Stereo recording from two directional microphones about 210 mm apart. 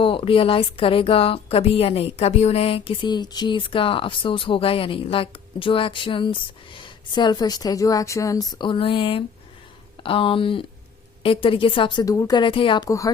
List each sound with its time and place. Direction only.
0.0 s speech: 25° left (ahead or behind)